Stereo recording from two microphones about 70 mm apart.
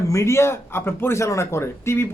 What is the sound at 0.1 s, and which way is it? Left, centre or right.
A man's voice, left.